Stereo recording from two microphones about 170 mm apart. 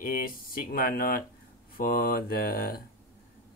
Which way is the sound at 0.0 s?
60° left (ahead or behind).